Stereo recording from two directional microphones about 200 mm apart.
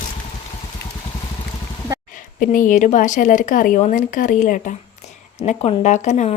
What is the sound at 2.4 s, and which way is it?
A woman's voice, 45° left (ahead or behind).